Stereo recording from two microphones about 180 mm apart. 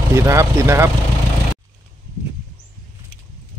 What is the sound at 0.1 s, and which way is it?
Speech, 15° right (ahead or behind).